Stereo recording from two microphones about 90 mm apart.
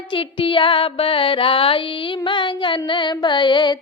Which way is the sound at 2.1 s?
65° left (ahead or behind).